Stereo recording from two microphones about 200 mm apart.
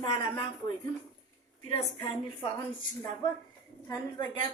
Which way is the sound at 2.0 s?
25° left (ahead or behind).